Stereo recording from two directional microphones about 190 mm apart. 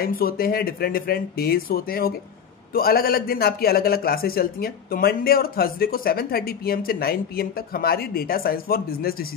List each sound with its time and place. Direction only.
0.0 s a man's voice: 50° left (ahead or behind)